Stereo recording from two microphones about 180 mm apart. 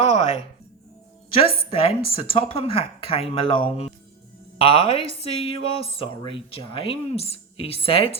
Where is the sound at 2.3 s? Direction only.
30° left (ahead or behind).